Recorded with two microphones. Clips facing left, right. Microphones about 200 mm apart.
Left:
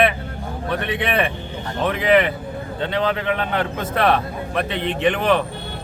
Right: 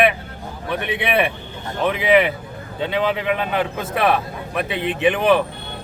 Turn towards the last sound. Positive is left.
turn(degrees=-10)  # may be behind; listen again after turning